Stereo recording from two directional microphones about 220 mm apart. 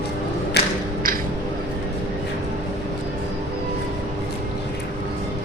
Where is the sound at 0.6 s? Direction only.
50° left (ahead or behind).